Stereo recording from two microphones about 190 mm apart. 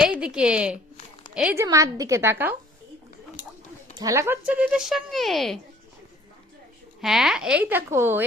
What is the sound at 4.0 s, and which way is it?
Speech, 15° right (ahead or behind).